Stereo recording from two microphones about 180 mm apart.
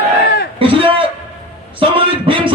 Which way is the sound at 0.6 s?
30° right (ahead or behind).